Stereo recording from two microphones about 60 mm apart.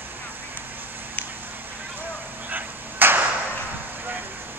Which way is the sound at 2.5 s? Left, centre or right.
Right.